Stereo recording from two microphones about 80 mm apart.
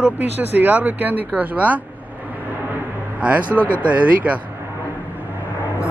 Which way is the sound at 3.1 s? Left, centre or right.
Centre.